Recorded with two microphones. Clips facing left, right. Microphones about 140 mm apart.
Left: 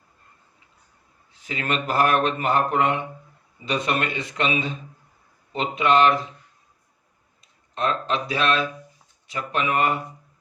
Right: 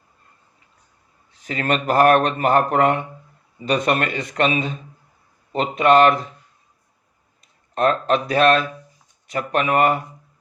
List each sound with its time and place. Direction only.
1.3 s a man's voice: 40° right (ahead or behind)
7.8 s a man's voice: 50° right (ahead or behind)